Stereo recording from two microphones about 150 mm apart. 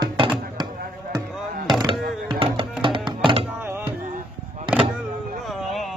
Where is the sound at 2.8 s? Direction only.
35° right (ahead or behind).